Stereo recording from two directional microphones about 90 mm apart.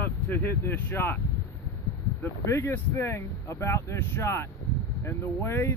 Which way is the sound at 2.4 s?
30° left (ahead or behind).